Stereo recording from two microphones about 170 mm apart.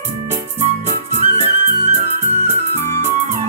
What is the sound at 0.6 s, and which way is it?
Music, 40° right (ahead or behind).